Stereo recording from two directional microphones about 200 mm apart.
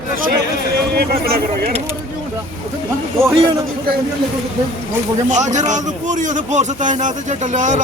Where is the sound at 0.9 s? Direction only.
50° right (ahead or behind).